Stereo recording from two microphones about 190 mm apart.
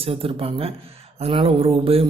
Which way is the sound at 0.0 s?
30° right (ahead or behind).